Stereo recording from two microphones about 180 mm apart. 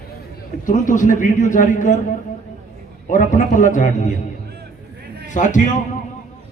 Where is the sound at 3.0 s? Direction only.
45° left (ahead or behind).